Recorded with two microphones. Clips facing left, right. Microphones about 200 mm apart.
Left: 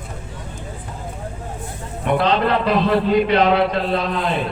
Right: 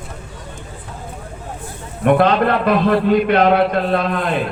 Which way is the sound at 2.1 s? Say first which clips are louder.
Right 4 dB; 55° right (ahead or behind).